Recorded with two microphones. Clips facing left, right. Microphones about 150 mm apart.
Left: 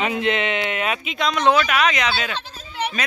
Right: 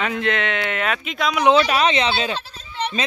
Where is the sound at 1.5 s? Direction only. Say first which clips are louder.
Right 2 dB; 30° right (ahead or behind).